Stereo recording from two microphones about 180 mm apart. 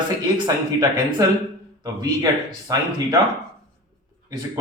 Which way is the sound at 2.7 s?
20° right (ahead or behind).